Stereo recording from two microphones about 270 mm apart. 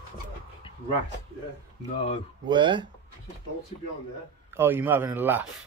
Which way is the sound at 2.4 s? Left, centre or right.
Centre.